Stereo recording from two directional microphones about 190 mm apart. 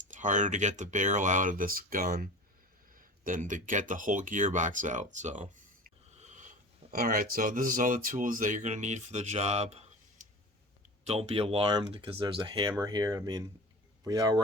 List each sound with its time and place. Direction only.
0.0 s speech: 40° right (ahead or behind); by 14.4 s 20° right (ahead or behind)